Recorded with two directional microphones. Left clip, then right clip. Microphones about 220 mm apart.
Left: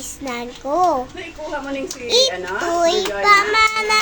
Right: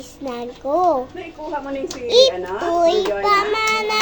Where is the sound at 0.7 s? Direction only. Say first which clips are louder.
Even; 30° left (ahead or behind).